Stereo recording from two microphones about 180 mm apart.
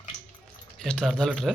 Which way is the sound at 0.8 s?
5° left (ahead or behind).